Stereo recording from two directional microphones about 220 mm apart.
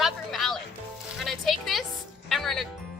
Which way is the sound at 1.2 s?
Centre (ahead or behind).